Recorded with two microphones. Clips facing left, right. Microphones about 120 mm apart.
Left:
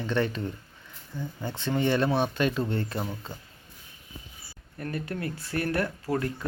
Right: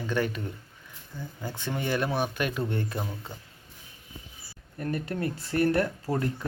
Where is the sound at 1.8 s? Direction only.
5° right (ahead or behind).